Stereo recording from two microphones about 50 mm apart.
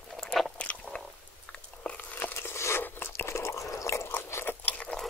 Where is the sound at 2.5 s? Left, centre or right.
Left.